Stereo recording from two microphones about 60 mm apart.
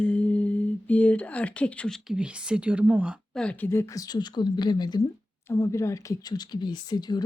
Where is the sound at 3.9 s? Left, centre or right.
Left.